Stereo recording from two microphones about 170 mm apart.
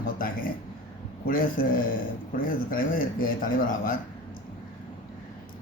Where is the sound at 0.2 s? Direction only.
55° left (ahead or behind).